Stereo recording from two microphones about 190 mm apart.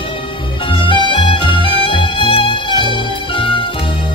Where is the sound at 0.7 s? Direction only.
25° left (ahead or behind).